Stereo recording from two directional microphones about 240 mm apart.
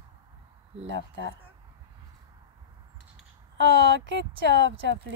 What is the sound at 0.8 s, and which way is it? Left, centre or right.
Speech, right.